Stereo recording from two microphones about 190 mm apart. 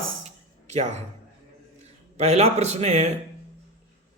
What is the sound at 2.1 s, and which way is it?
Speech, 35° right (ahead or behind).